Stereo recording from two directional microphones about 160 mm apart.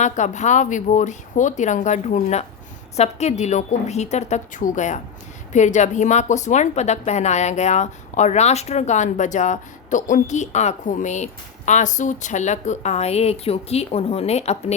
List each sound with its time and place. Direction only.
0.0 s a woman's voice: 50° left (ahead or behind)